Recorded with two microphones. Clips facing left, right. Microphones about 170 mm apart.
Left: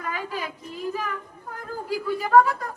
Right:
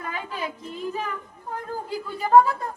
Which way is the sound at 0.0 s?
30° right (ahead or behind).